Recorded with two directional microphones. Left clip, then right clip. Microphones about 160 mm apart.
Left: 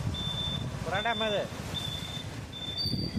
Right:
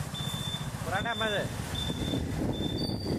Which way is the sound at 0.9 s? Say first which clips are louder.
Left 1 dB; 40° left (ahead or behind).